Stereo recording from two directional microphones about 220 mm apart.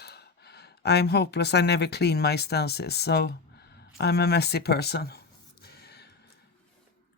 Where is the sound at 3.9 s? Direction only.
45° left (ahead or behind).